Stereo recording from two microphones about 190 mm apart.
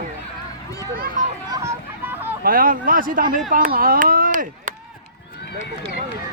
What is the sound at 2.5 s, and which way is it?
Speech, 45° right (ahead or behind).